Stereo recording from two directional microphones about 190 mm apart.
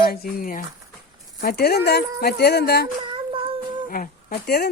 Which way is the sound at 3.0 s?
25° right (ahead or behind).